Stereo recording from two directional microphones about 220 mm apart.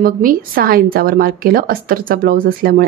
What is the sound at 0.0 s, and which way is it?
A woman's voice, 40° right (ahead or behind).